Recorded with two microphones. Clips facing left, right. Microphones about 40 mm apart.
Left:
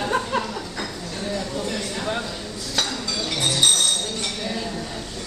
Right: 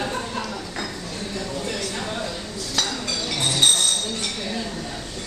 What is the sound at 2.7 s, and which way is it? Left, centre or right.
Chink, centre.